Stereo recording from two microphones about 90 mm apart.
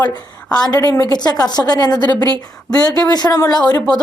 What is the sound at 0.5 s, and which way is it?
A woman's voice, 45° left (ahead or behind).